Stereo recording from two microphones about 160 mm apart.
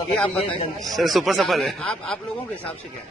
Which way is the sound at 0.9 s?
Centre (ahead or behind).